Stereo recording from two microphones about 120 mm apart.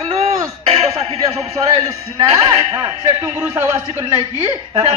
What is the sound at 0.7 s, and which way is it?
A woman's voice, 60° right (ahead or behind).